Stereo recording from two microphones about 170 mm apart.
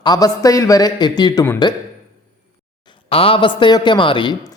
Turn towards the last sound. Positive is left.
turn(degrees=30)  # may be behind; listen again after turning